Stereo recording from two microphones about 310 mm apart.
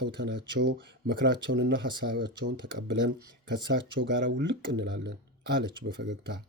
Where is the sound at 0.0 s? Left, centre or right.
Right.